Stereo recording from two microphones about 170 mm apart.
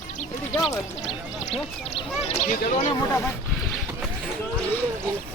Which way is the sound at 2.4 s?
50° left (ahead or behind).